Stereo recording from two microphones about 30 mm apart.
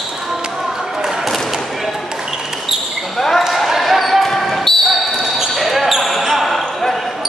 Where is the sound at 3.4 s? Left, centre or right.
Centre.